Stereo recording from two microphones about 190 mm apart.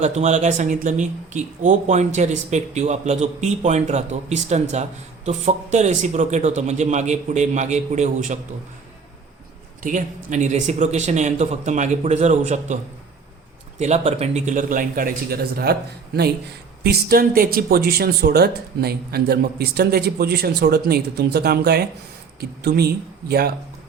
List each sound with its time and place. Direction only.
0.0 s speech: 35° right (ahead or behind)
9.8 s a man's voice: 45° right (ahead or behind)